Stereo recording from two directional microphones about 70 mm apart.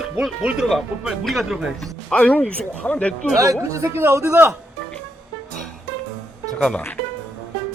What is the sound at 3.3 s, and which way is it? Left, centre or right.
Speech, right.